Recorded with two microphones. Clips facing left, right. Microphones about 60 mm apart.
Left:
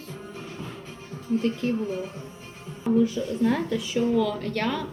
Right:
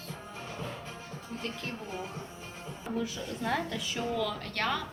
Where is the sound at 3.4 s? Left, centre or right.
Centre.